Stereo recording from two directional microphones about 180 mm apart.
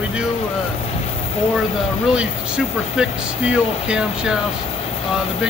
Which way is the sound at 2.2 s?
5° right (ahead or behind).